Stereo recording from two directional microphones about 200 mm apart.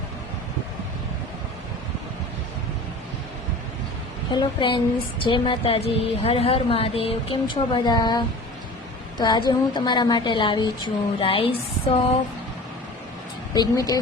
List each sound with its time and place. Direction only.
4.4 s a woman's voice: 25° left (ahead or behind)
13.5 s speech: 20° left (ahead or behind)